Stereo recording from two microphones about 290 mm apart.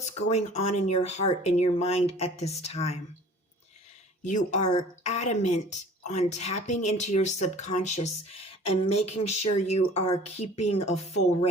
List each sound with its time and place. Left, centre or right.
0.0 s speech: left
4.2 s speech: left